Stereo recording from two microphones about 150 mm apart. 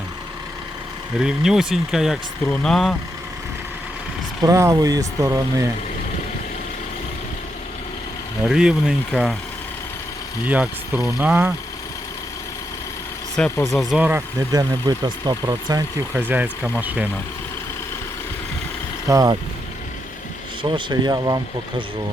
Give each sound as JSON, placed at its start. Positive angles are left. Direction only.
{"t": 1.2, "sound": "speech", "side_deg": -5}
{"t": 4.4, "sound": "speech", "side_deg": -20}
{"t": 8.4, "sound": "speech", "side_deg": -5}
{"t": 10.4, "sound": "speech", "side_deg": -10}
{"t": 13.7, "sound": "speech", "side_deg": 0}
{"t": 14.5, "sound": "speech", "side_deg": -25}
{"t": 16.1, "sound": "speech", "side_deg": -10}
{"t": 19.0, "sound": "speech", "side_deg": -25}
{"t": 20.6, "sound": "speech", "side_deg": -35}